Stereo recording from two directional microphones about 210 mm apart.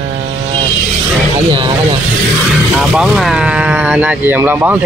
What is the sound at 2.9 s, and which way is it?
Speech, 5° right (ahead or behind).